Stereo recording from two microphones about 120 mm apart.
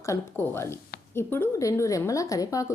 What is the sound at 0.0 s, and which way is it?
A woman's voice, 25° left (ahead or behind).